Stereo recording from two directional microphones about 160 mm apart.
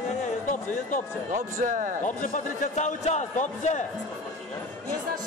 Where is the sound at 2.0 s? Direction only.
50° left (ahead or behind).